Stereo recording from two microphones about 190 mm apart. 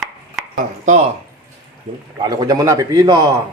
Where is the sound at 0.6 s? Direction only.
40° right (ahead or behind).